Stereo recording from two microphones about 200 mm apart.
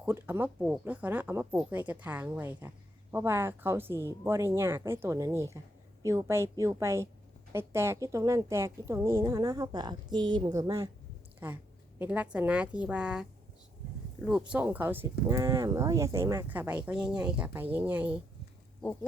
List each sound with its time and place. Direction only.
0.0 s a woman's voice: 10° right (ahead or behind)
14.3 s speech: 5° right (ahead or behind)